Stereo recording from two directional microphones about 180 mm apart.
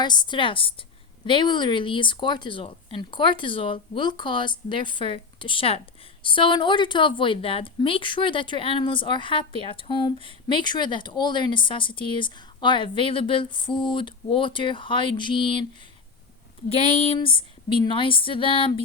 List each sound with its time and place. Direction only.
0.0 s speech: 25° left (ahead or behind)
16.6 s speech: 35° left (ahead or behind)